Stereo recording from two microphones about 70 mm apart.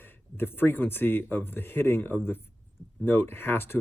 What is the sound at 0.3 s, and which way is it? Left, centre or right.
Speech, left.